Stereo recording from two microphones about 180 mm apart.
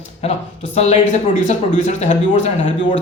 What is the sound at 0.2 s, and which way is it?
A man's voice, 35° left (ahead or behind).